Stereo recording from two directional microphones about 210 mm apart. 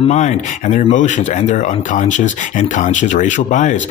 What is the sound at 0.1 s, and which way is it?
Speech, 35° left (ahead or behind).